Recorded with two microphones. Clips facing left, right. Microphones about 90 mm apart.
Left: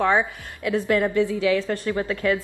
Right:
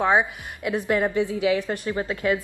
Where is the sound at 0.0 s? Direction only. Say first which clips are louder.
Even; 15° right (ahead or behind).